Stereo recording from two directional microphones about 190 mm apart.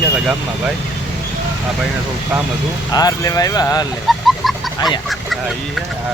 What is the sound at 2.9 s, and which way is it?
Speech, 20° left (ahead or behind).